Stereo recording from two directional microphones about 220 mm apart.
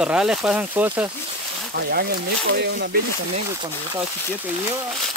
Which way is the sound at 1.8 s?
45° right (ahead or behind).